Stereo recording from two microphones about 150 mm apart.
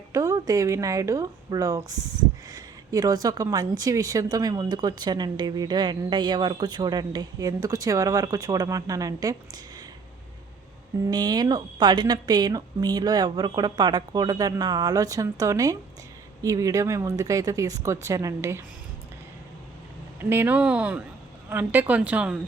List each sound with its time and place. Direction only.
0.1 s speech: 20° right (ahead or behind)
11.1 s speech: 30° right (ahead or behind)
20.3 s a woman's voice: 10° right (ahead or behind)